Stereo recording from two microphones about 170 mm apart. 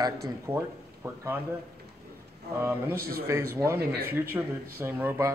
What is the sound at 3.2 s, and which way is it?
Speech, 15° right (ahead or behind).